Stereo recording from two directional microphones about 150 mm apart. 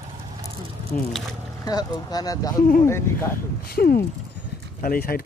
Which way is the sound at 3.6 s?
90° left.